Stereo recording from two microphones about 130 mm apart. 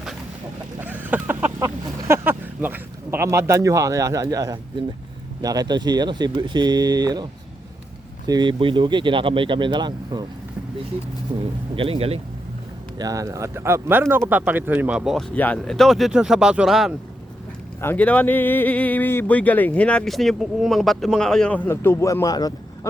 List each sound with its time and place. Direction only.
0.8 s speech: 15° right (ahead or behind); by 7.3 s 30° right (ahead or behind)
8.3 s speech: 35° right (ahead or behind)
11.3 s speech: 45° right (ahead or behind)
13.0 s speech: 25° right (ahead or behind); by 15.2 s 5° right (ahead or behind)
15.4 s speech: 10° left (ahead or behind)
17.7 s speech: 15° left (ahead or behind); by 22.9 s 30° left (ahead or behind)